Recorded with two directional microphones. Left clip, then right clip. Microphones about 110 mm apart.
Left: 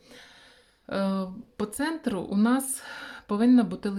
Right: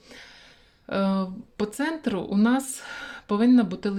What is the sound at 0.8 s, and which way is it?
Speech, 15° right (ahead or behind).